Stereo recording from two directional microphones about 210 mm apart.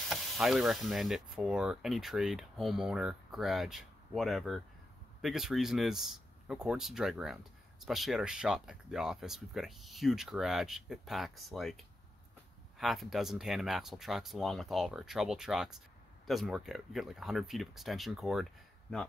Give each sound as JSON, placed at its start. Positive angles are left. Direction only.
{"t": 0.0, "sound": "speech", "side_deg": 0}